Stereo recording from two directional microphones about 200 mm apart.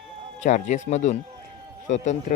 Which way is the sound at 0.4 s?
35° left (ahead or behind).